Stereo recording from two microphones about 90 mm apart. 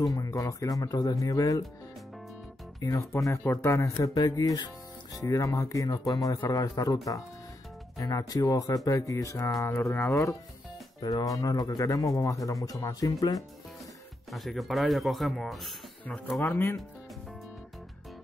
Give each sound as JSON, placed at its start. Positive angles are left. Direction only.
{"t": 0.1, "sound": "speech", "side_deg": 40}
{"t": 2.8, "sound": "speech", "side_deg": 40}
{"t": 8.0, "sound": "speech", "side_deg": 40}
{"t": 11.0, "sound": "speech", "side_deg": 50}
{"t": 14.3, "sound": "speech", "side_deg": 0}
{"t": 16.3, "sound": "speech", "side_deg": 30}